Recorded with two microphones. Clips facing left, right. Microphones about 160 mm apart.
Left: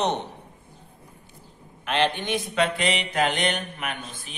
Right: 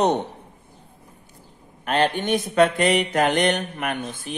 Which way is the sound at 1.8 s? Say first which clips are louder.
Right 3 dB; 45° right (ahead or behind).